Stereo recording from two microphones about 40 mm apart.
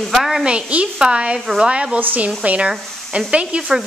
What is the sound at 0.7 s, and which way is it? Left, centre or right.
Speech, right.